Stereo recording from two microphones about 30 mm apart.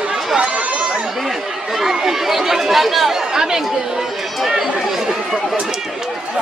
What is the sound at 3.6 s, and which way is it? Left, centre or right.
A woman's voice, centre.